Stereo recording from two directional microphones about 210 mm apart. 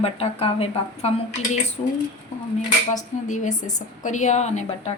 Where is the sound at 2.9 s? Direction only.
35° left (ahead or behind).